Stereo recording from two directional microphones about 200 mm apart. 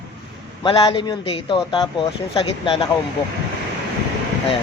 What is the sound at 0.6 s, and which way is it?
Speech, 25° left (ahead or behind).